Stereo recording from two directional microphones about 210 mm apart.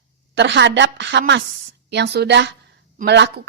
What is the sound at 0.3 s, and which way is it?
A woman's voice, 55° right (ahead or behind).